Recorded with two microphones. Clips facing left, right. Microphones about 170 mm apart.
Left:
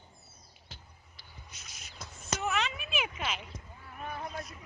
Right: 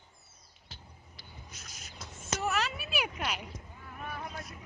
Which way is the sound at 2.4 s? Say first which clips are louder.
Right 1 dB; 5° right (ahead or behind).